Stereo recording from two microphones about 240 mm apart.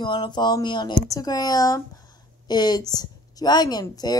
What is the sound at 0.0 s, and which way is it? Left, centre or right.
A woman's voice, centre.